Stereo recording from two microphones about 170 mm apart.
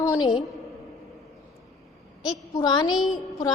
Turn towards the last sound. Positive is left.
turn(degrees=25)  # may be behind; listen again after turning